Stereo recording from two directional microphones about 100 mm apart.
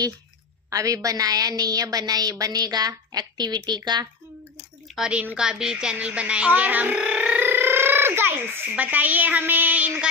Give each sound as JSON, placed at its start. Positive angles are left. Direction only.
{"t": 0.7, "sound": "a woman's voice", "side_deg": -35}
{"t": 4.9, "sound": "a woman's voice", "side_deg": -5}
{"t": 5.2, "sound": "a sound", "side_deg": -10}
{"t": 8.7, "sound": "a woman's voice", "side_deg": -15}